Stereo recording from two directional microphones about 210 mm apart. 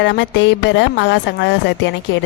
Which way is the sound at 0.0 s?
60° left (ahead or behind).